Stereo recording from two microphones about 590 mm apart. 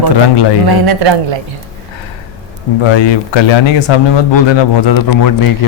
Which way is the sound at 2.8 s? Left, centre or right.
Left.